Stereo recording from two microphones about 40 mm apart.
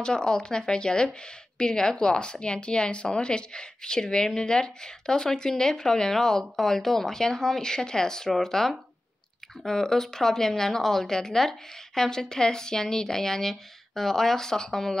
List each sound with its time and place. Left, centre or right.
0.0 s a woman's voice: centre